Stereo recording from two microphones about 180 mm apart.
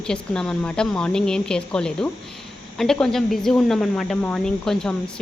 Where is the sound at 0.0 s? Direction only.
5° left (ahead or behind).